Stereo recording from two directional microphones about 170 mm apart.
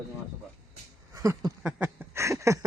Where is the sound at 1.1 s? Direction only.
20° right (ahead or behind).